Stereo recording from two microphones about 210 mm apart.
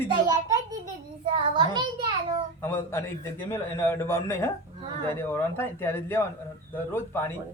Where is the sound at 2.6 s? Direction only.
10° left (ahead or behind).